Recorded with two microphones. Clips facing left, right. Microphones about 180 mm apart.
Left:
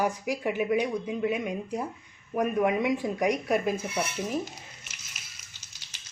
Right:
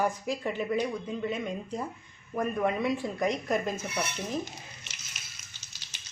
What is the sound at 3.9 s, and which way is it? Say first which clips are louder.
Stir: left 3 dB; 5° left (ahead or behind).